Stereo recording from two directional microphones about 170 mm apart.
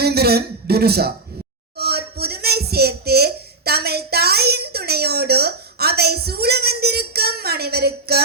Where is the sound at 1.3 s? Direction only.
65° right (ahead or behind).